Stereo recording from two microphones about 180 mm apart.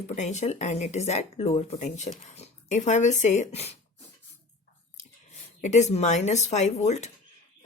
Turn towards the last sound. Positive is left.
turn(degrees=40)  # may be behind; listen again after turning